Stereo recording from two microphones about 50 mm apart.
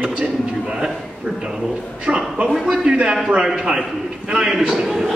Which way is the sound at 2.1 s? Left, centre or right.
Right.